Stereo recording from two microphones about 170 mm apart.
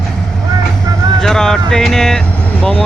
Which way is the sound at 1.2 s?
5° left (ahead or behind).